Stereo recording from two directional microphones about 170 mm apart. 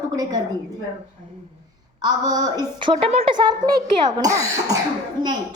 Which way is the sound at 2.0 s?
25° right (ahead or behind).